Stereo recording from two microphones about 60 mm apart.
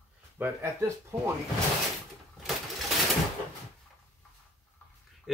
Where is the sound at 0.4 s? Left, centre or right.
Right.